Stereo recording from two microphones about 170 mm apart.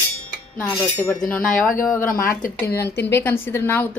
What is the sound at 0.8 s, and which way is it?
Speech, 10° left (ahead or behind).